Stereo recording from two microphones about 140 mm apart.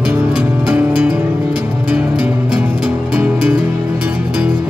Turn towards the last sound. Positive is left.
turn(degrees=-10)  # may be behind; listen again after turning